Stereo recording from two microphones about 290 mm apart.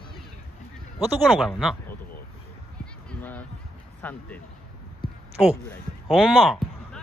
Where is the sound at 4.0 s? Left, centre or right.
Centre.